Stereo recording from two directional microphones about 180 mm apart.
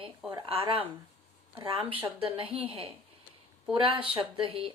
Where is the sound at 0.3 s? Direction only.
25° right (ahead or behind).